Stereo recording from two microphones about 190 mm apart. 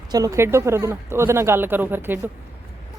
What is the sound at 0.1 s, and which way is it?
Speech, 15° right (ahead or behind).